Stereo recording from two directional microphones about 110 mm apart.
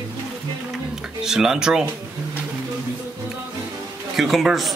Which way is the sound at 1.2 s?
5° right (ahead or behind).